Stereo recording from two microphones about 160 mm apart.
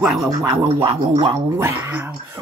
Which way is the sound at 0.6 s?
30° right (ahead or behind).